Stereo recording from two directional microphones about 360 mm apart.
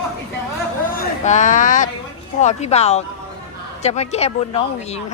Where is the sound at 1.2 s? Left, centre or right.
Centre.